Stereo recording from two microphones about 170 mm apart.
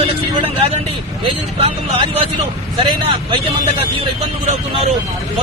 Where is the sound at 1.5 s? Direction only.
35° right (ahead or behind).